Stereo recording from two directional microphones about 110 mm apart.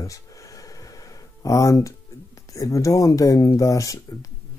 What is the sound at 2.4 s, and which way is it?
Speech, 30° left (ahead or behind).